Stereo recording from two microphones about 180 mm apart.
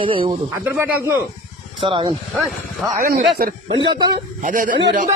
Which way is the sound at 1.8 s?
30° right (ahead or behind).